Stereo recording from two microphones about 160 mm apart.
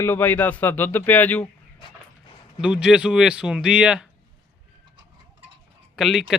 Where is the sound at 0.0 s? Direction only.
15° left (ahead or behind).